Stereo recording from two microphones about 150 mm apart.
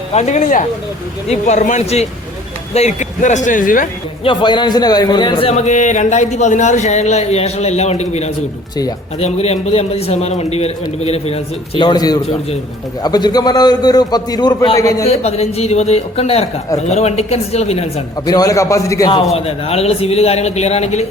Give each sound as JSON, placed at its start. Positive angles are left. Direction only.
{"t": 0.1, "sound": "a man's voice", "side_deg": 50}
{"t": 4.2, "sound": "a man's voice", "side_deg": 35}
{"t": 5.5, "sound": "a man's voice", "side_deg": 50}
{"t": 14.8, "sound": "a man's voice", "side_deg": 20}
{"t": 15.0, "sound": "a man's voice", "side_deg": 45}
{"t": 18.3, "sound": "a man's voice", "side_deg": 25}
{"t": 19.3, "sound": "a man's voice", "side_deg": 45}